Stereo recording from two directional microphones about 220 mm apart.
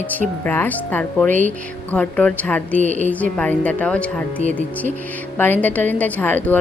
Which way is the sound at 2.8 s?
35° right (ahead or behind).